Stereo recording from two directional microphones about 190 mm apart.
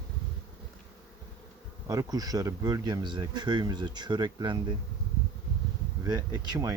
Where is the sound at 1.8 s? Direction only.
20° right (ahead or behind).